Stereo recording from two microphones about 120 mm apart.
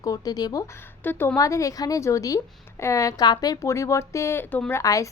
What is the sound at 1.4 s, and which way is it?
A woman's voice, 25° left (ahead or behind).